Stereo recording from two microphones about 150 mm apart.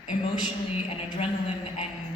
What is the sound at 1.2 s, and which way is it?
Speech, 40° left (ahead or behind).